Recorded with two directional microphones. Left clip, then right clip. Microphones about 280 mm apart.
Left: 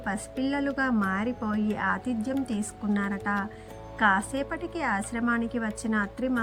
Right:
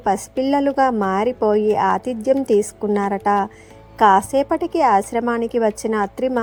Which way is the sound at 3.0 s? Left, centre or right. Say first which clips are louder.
Right 14 dB; right.